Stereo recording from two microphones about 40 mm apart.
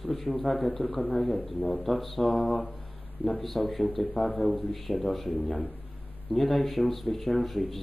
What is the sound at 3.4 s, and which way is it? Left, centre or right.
Speech, centre.